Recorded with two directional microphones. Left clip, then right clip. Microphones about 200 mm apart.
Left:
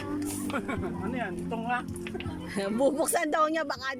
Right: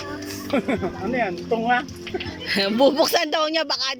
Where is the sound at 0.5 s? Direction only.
35° right (ahead or behind).